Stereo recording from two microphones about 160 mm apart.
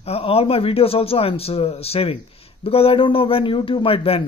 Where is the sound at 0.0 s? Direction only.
40° left (ahead or behind).